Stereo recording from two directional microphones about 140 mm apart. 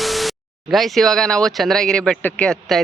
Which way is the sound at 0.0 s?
Centre (ahead or behind).